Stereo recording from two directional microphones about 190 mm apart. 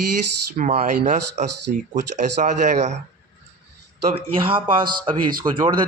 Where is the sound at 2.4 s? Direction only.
40° right (ahead or behind).